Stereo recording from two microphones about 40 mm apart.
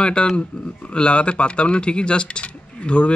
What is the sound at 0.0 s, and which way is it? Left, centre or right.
Speech, left.